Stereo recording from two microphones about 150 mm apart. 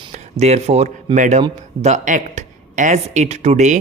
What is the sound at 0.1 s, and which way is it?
Speech, 50° right (ahead or behind).